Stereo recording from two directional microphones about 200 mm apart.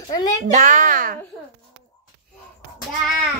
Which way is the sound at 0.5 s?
40° right (ahead or behind).